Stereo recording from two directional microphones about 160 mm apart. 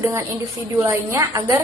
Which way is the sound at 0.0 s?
15° right (ahead or behind).